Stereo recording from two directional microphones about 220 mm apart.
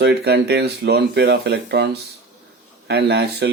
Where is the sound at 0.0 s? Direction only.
50° right (ahead or behind).